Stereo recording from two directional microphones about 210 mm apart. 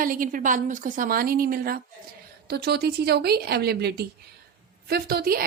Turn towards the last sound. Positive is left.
turn(degrees=-45)  # may be behind; listen again after turning